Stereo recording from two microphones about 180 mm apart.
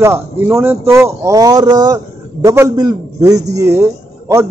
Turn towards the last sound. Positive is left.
turn(degrees=-20)  # may be behind; listen again after turning